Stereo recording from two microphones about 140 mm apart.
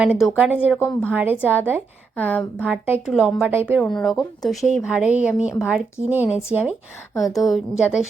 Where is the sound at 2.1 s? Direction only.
10° left (ahead or behind).